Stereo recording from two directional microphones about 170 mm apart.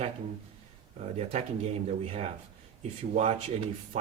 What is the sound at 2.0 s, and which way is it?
A man's voice, 40° right (ahead or behind).